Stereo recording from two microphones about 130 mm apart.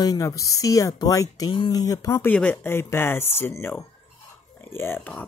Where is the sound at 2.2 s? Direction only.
10° left (ahead or behind).